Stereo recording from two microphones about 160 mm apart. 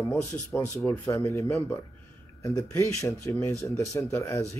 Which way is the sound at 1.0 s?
20° left (ahead or behind).